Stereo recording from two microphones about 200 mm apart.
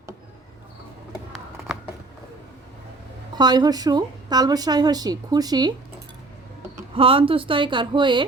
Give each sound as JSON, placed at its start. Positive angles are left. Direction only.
{"t": 3.3, "sound": "a woman's voice", "side_deg": -20}
{"t": 6.7, "sound": "a woman's voice", "side_deg": -25}